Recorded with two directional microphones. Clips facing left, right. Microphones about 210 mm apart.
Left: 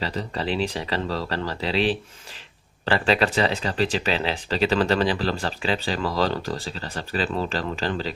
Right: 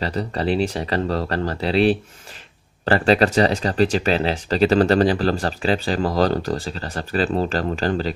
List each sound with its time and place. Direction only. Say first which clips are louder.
0.0 s speech: right 5 dB; 45° right (ahead or behind)